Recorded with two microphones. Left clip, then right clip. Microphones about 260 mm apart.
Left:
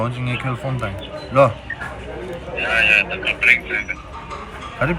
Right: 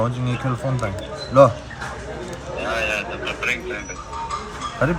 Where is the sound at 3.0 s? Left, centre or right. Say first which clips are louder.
Left 7 dB; left.